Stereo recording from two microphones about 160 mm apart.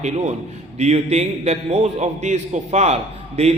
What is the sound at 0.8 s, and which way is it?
A man's voice, 45° right (ahead or behind).